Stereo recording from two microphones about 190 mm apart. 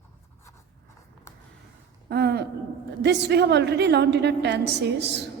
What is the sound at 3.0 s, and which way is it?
A woman's voice, 65° right (ahead or behind).